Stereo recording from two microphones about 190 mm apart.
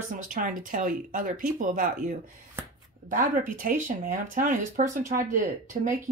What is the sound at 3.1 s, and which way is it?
Speech, 45° right (ahead or behind).